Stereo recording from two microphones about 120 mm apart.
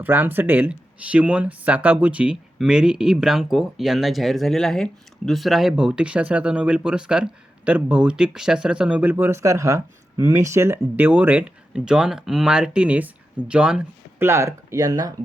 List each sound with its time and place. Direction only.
0.0 s speech: 15° right (ahead or behind)
14.2 s speech: 20° right (ahead or behind)